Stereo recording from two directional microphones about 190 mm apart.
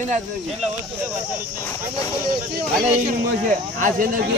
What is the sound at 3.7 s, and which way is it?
Speech, 45° right (ahead or behind).